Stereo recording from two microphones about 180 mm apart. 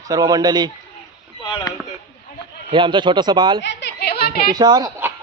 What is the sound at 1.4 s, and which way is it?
Chop, 25° left (ahead or behind).